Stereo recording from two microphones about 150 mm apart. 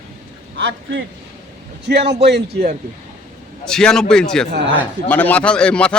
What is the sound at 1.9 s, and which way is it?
Speech, 90° right.